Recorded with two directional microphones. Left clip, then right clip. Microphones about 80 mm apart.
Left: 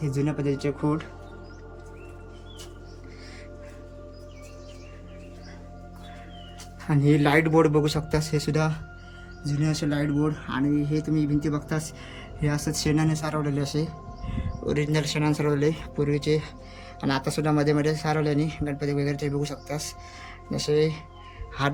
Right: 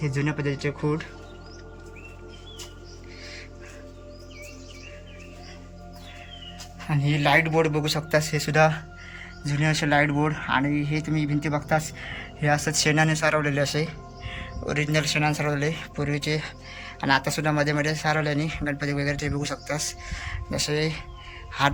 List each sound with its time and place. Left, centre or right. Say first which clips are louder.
0.0 s speech: even; centre
6.8 s a man's voice: left 1 dB; left
8.1 s speech: right 4 dB; centre
9.4 s speech: right 3 dB; centre
11.9 s speech: right 4 dB; centre
14.3 s music: right 3 dB; centre
14.7 s speech: right 2 dB; centre